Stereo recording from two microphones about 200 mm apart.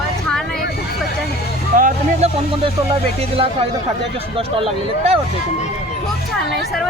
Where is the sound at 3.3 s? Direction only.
30° right (ahead or behind).